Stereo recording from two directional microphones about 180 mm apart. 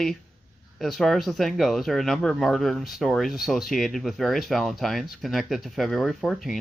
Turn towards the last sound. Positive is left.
turn(degrees=0)  # may be behind; listen again after turning